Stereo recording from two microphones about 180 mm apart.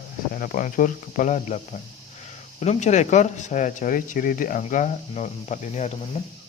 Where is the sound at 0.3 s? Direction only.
50° left (ahead or behind).